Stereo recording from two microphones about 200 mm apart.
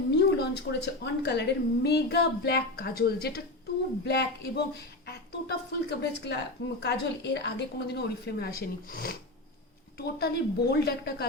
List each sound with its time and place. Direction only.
0.1 s a woman's voice: 55° left (ahead or behind)